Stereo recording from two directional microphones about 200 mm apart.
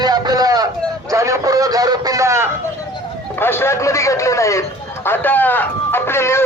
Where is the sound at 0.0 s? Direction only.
20° right (ahead or behind).